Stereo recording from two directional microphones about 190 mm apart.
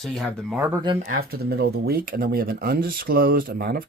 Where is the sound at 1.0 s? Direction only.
45° right (ahead or behind).